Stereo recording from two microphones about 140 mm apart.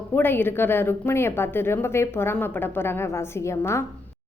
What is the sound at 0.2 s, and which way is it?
A woman's voice, 15° left (ahead or behind).